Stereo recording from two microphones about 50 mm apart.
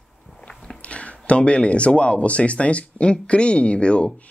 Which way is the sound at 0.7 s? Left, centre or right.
Left.